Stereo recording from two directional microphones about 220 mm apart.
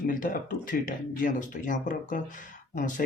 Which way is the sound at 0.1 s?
40° left (ahead or behind).